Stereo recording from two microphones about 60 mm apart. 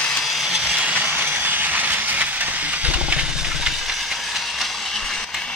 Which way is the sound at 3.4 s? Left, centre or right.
Centre.